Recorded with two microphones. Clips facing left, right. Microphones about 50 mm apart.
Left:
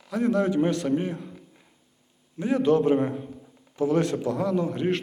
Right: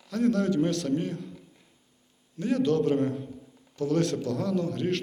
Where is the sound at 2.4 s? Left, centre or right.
Centre.